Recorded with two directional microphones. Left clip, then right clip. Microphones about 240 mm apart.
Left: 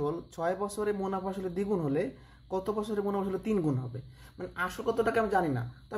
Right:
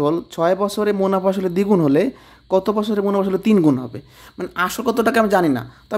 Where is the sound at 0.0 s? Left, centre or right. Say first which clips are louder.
Right 14 dB; right.